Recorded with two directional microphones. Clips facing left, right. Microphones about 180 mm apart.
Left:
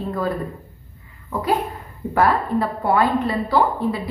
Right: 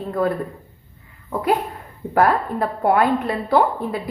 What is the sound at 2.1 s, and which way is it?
A woman's voice, 50° right (ahead or behind).